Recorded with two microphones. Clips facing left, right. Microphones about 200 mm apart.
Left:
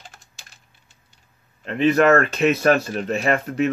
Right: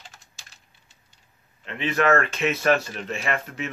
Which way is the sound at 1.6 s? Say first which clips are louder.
Left 7 dB; 40° left (ahead or behind).